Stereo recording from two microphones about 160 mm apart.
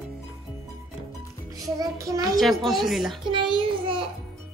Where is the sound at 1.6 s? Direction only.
20° right (ahead or behind).